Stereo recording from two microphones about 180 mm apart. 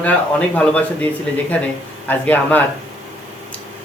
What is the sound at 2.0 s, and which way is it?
Speech, 10° left (ahead or behind).